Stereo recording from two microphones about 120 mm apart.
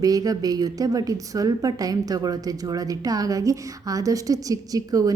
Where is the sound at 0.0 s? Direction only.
30° right (ahead or behind).